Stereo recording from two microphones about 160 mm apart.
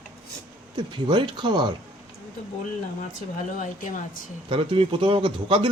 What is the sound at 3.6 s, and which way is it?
Speech, 55° left (ahead or behind).